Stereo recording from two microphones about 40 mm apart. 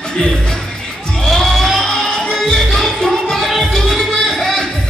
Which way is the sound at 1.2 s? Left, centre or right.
Centre.